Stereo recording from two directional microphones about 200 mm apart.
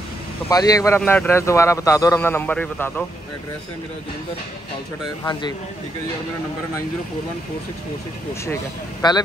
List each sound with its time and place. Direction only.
0.5 s a man's voice: 20° left (ahead or behind)
5.2 s a man's voice: 20° left (ahead or behind)
9.0 s a man's voice: 20° left (ahead or behind)